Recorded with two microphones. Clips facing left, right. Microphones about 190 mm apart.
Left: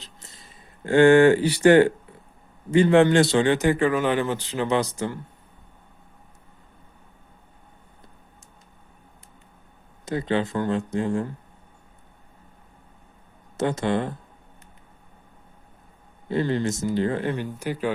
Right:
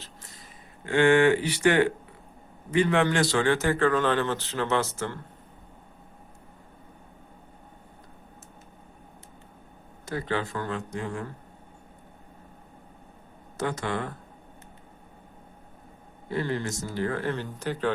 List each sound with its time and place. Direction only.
0.0 s a sound: 25° left (ahead or behind)
0.9 s speech: 35° left (ahead or behind); by 5.2 s 15° left (ahead or behind)
10.1 s speech: 20° left (ahead or behind)
13.6 s speech: 25° left (ahead or behind)
16.3 s speech: 25° left (ahead or behind)